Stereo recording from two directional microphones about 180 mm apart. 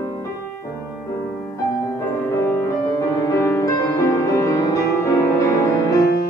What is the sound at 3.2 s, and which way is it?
Music, 15° left (ahead or behind).